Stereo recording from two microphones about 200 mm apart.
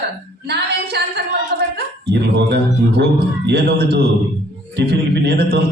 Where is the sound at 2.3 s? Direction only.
55° right (ahead or behind).